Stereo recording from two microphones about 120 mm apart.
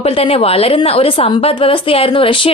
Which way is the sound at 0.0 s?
55° left (ahead or behind).